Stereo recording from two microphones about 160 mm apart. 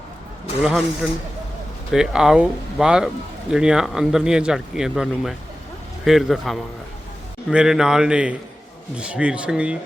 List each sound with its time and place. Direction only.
0.6 s speech: 5° right (ahead or behind)